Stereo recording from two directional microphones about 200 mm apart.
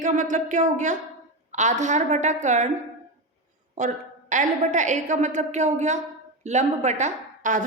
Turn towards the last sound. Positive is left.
turn(degrees=-40)  # may be behind; listen again after turning